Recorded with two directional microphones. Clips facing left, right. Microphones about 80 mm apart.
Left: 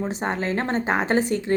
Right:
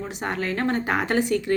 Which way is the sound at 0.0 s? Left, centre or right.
Left.